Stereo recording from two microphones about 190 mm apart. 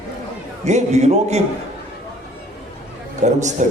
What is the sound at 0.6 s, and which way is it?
Speech, 35° right (ahead or behind).